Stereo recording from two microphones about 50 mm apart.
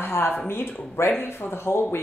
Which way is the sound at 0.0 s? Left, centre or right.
Left.